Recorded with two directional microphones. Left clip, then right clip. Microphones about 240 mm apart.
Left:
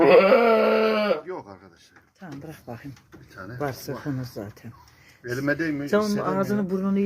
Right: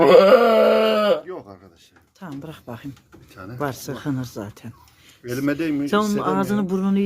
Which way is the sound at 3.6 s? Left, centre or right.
Centre.